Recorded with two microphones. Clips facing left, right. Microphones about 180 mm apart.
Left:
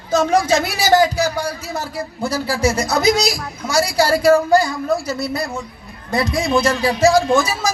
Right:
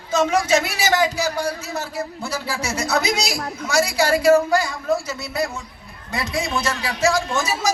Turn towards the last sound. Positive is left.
turn(degrees=35)  # may be behind; listen again after turning